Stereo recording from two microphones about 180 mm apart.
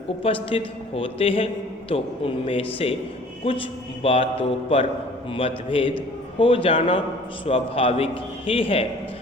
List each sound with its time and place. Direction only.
0.2 s a man's voice: 30° left (ahead or behind)